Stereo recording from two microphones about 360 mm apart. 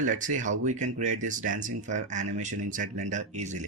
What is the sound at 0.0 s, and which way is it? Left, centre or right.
Speech, right.